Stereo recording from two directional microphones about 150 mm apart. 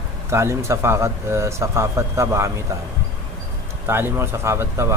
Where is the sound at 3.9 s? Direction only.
15° right (ahead or behind).